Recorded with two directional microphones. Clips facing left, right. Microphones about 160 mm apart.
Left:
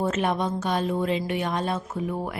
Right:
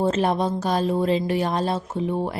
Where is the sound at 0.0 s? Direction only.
30° right (ahead or behind).